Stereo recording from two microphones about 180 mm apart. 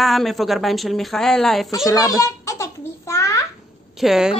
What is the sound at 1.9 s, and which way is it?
Babbling, 20° left (ahead or behind).